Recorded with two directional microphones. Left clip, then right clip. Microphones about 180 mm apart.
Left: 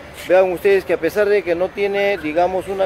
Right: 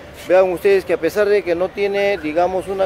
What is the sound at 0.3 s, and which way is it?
Speech, 5° right (ahead or behind).